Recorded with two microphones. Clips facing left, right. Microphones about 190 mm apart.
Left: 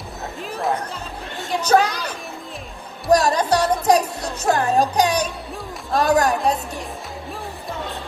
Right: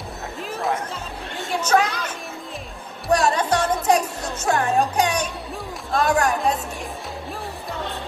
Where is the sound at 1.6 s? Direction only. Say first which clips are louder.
Left 3 dB; 35° left (ahead or behind).